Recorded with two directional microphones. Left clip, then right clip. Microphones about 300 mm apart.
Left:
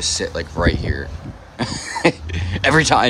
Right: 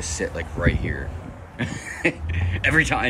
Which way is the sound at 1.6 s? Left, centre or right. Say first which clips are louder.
Left 6 dB; centre.